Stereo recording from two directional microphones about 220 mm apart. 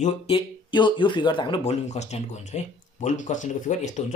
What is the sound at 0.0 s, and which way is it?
Speech, 25° left (ahead or behind).